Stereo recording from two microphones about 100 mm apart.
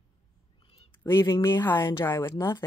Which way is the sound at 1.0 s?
25° left (ahead or behind).